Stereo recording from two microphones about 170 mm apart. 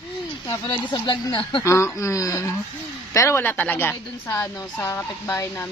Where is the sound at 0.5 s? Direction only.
25° left (ahead or behind).